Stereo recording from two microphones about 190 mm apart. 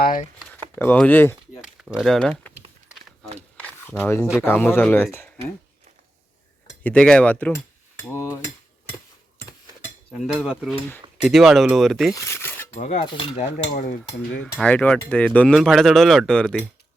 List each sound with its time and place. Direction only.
0.0 s speech: 45° left (ahead or behind)
0.5 s speech: 10° left (ahead or behind)
1.6 s speech: 5° right (ahead or behind)
3.6 s a sound: 5° left (ahead or behind)
4.4 s a man's voice: 10° left (ahead or behind)
6.8 s a man's voice: 5° left (ahead or behind)
10.2 s speech: 5° right (ahead or behind)
12.1 s speech: 15° left (ahead or behind)
12.7 s cutlery: 30° left (ahead or behind)
14.4 s speech: 5° left (ahead or behind)